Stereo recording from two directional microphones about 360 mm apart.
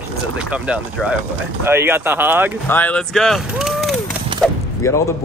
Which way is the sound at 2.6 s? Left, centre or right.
Centre.